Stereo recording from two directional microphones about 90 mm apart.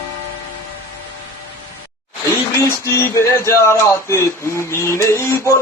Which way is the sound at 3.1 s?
30° left (ahead or behind).